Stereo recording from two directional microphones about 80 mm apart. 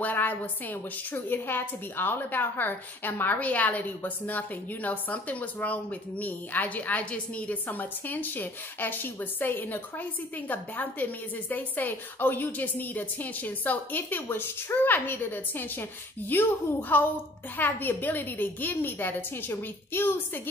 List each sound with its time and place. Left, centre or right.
0.0 s a woman's voice: left